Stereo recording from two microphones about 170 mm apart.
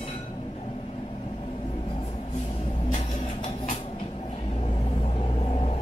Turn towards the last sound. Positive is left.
turn(degrees=35)  # may be behind; listen again after turning